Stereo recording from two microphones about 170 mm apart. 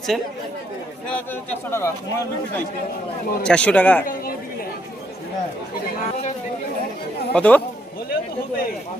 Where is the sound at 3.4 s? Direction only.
5° left (ahead or behind).